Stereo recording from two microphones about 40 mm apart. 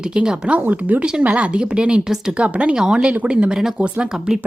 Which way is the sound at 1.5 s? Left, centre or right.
Right.